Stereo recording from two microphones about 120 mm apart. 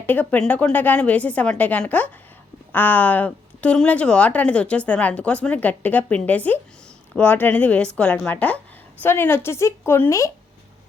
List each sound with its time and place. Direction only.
0.0 s a woman's voice: 15° left (ahead or behind)